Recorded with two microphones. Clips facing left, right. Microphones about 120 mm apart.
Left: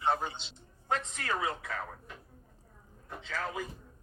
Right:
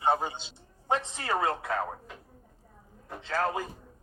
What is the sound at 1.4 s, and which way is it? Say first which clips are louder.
Speech: right 7 dB; 75° right (ahead or behind).